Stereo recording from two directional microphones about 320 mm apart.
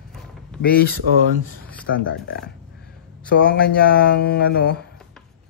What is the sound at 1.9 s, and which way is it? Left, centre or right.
Speech, left.